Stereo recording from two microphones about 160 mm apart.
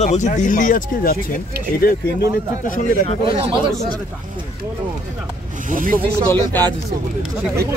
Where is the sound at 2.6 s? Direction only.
55° left (ahead or behind).